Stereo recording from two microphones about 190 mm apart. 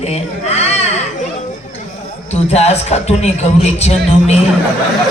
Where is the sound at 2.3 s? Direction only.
35° left (ahead or behind).